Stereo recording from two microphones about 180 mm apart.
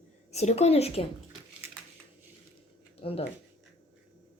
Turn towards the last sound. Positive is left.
turn(degrees=35)  # may be behind; listen again after turning